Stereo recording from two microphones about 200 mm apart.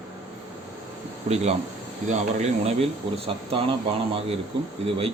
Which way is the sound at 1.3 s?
40° right (ahead or behind).